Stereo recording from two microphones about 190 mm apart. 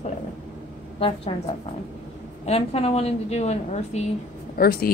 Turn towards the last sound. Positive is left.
turn(degrees=55)  # may be behind; listen again after turning